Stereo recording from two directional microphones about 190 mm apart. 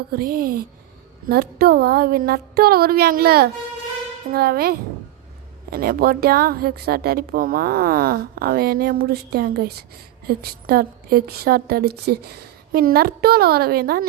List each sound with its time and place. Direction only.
0.1 s speech: 50° right (ahead or behind)